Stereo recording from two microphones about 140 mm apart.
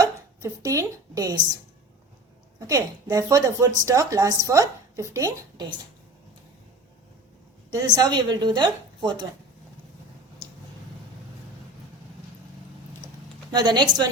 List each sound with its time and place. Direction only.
0.0 s speech: 25° right (ahead or behind)
2.6 s speech: 25° right (ahead or behind)
7.7 s a woman's voice: 30° right (ahead or behind)
13.5 s a woman's voice: 30° right (ahead or behind)